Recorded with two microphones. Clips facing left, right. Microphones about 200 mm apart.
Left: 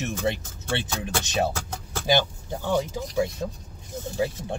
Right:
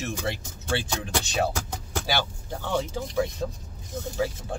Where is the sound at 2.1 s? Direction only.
20° left (ahead or behind).